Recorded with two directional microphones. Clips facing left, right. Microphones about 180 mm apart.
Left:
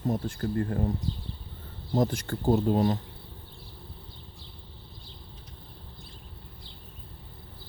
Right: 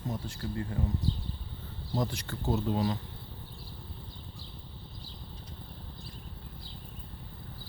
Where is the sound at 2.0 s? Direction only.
45° left (ahead or behind).